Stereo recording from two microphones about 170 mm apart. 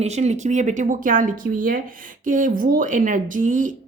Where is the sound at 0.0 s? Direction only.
40° right (ahead or behind).